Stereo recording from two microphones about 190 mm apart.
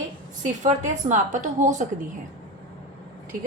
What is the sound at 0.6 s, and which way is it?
A woman's voice, 40° right (ahead or behind).